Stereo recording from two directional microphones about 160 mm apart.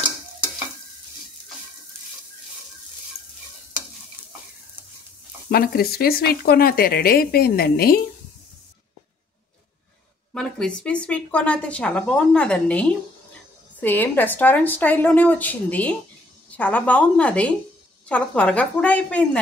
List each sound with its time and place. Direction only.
5.5 s speech: 70° left (ahead or behind)
10.3 s speech: 5° left (ahead or behind)